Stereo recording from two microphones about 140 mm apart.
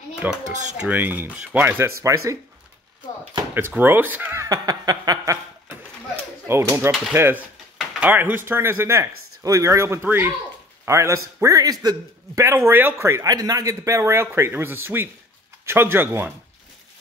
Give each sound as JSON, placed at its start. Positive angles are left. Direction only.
{"t": 0.1, "sound": "a sound", "side_deg": -5}
{"t": 0.7, "sound": "speech", "side_deg": -10}
{"t": 3.5, "sound": "speech", "side_deg": -15}
{"t": 6.4, "sound": "speech", "side_deg": -20}
{"t": 7.7, "sound": "a sound", "side_deg": -10}
{"t": 8.5, "sound": "a man's voice", "side_deg": -15}